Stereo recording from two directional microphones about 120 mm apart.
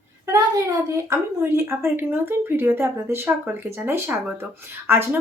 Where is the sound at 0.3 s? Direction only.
25° right (ahead or behind).